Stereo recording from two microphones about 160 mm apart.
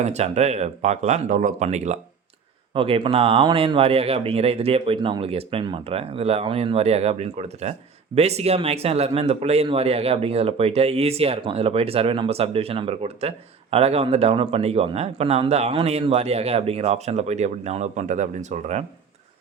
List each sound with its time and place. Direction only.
0.0 s speech: 45° right (ahead or behind)
2.7 s speech: 35° right (ahead or behind)